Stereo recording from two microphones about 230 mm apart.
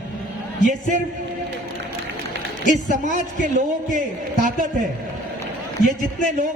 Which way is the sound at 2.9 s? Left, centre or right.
Right.